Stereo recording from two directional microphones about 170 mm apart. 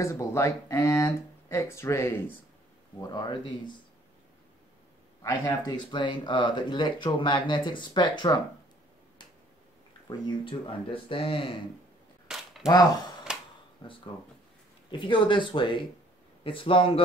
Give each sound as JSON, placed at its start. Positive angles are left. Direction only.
{"t": 0.0, "sound": "speech", "side_deg": 15}
{"t": 5.2, "sound": "speech", "side_deg": 20}
{"t": 10.0, "sound": "speech", "side_deg": 30}
{"t": 12.3, "sound": "a sound", "side_deg": -5}
{"t": 12.6, "sound": "speech", "side_deg": 25}